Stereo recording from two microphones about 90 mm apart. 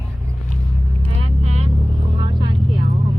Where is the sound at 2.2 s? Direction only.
55° right (ahead or behind).